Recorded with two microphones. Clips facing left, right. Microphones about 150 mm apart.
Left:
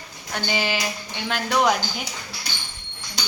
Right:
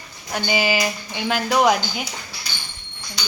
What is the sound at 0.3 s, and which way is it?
Speech, 5° right (ahead or behind).